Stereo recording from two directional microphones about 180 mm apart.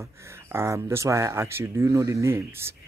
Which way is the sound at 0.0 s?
15° right (ahead or behind).